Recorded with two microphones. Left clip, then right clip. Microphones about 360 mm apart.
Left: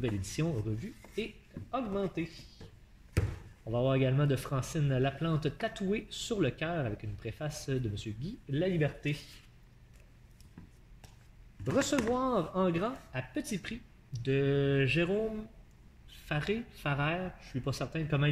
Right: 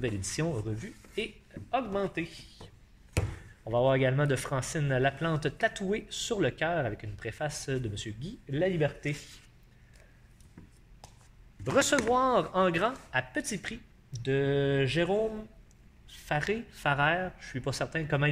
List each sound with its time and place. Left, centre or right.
0.0 s speech: centre
3.7 s speech: centre
11.7 s speech: right
16.1 s speech: centre